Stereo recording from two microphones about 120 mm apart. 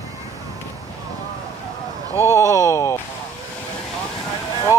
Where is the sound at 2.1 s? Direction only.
20° left (ahead or behind).